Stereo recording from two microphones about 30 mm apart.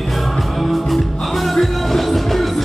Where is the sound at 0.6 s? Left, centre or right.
Centre.